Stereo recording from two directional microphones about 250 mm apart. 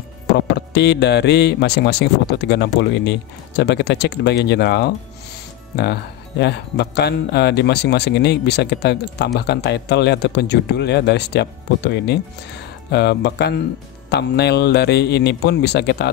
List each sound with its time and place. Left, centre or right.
0.6 s speech: left
6.4 s speech: left